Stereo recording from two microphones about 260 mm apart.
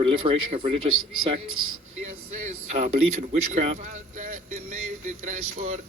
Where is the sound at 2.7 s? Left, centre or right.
Right.